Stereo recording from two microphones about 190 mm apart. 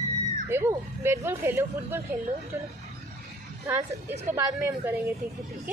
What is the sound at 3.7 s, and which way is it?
Speech, 10° right (ahead or behind).